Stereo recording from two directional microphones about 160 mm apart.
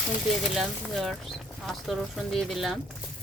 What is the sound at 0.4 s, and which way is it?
Speech, centre (ahead or behind).